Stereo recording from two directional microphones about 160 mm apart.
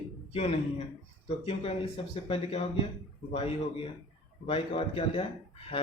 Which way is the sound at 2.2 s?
40° left (ahead or behind).